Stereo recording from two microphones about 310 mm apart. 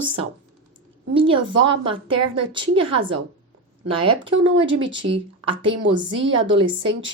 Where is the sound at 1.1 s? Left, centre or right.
Centre.